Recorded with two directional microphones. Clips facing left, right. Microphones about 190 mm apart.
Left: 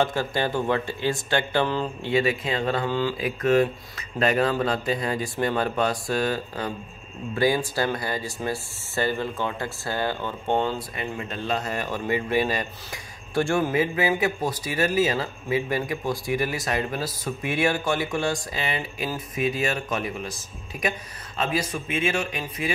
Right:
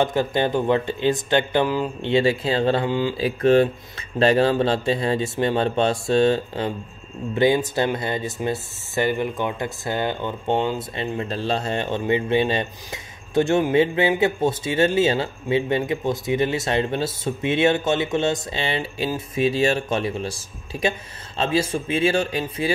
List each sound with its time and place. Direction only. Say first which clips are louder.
0.0 s speech: right 4 dB; 20° right (ahead or behind)
2.9 s mantra: right 3 dB; 15° right (ahead or behind)
3.2 s speech: right 5 dB; 30° right (ahead or behind)
11.0 s speech: right 5 dB; 30° right (ahead or behind)